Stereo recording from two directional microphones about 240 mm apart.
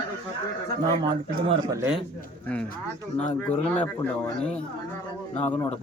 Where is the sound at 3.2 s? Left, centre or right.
Centre.